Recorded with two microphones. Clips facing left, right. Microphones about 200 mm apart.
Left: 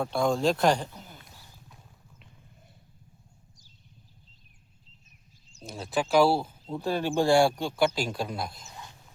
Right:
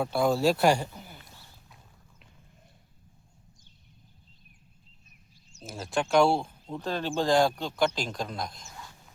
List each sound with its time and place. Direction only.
0.0 s speech: 5° right (ahead or behind)
5.6 s speech: centre (ahead or behind)
8.6 s a sound: 20° left (ahead or behind)